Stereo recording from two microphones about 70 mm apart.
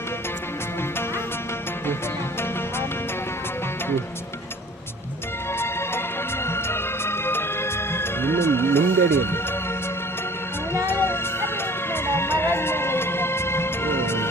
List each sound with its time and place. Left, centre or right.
6.7 s music: left
10.8 s music: left